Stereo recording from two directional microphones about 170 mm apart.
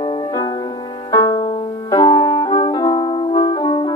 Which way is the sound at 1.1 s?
20° left (ahead or behind).